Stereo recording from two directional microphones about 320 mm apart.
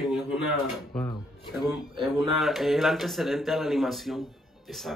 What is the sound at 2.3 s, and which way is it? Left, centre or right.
A man's voice, centre.